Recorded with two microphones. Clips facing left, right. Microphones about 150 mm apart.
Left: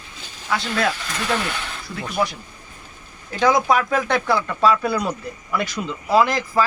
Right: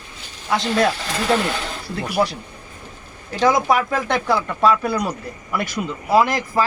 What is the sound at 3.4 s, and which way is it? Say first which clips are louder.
Speech: even; centre (ahead or behind).